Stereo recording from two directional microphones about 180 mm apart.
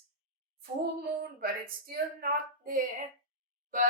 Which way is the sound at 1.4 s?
55° right (ahead or behind).